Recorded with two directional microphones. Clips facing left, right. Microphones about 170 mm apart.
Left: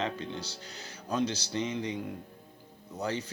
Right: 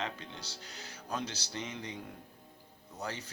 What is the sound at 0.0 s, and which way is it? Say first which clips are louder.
Speech: left 6 dB; 30° left (ahead or behind).